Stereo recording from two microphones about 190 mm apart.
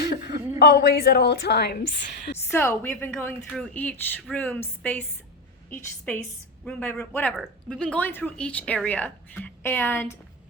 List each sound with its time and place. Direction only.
0.6 s a woman's voice: 55° left (ahead or behind)
2.5 s speech: 15° left (ahead or behind)
6.1 s speech: 10° left (ahead or behind)